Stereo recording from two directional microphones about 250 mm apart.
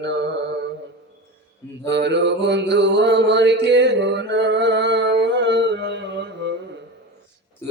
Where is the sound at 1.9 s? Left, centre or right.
Right.